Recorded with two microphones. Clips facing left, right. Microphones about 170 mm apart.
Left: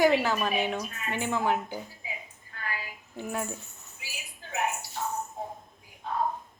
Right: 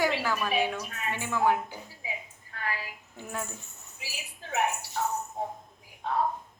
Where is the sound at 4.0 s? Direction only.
90° right.